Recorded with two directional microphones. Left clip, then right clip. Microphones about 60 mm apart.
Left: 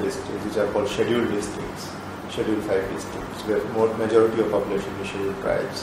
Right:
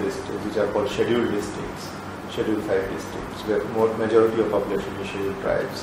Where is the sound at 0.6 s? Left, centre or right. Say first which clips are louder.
Even; left.